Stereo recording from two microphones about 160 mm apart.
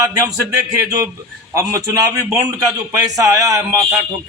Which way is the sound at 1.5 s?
20° right (ahead or behind).